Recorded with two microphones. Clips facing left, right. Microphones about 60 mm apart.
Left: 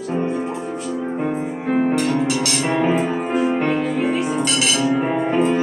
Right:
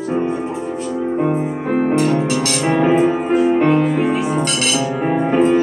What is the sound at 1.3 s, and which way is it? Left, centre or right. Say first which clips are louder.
Music: right 3 dB; centre.